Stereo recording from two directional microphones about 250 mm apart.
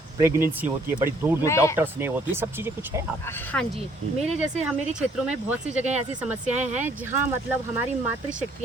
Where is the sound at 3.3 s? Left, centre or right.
Centre.